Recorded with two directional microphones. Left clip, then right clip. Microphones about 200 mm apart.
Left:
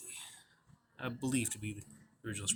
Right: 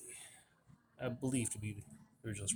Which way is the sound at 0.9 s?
15° right (ahead or behind).